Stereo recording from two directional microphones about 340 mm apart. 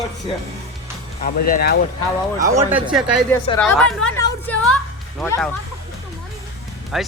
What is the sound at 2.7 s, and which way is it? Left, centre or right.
A man's voice, centre.